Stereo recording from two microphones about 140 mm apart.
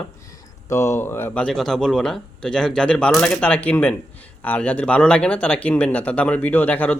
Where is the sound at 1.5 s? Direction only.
Centre (ahead or behind).